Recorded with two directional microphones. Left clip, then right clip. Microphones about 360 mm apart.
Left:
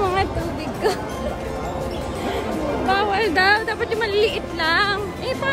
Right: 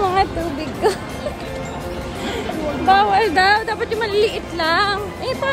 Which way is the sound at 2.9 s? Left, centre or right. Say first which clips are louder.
Right 7 dB; centre.